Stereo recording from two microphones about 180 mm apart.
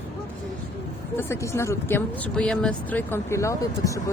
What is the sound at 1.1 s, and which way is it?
Speech, 15° left (ahead or behind).